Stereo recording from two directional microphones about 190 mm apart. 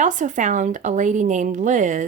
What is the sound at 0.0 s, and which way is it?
Speech, 40° right (ahead or behind).